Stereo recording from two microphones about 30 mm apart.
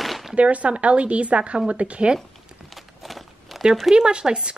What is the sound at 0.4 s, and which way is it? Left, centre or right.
A woman's voice, right.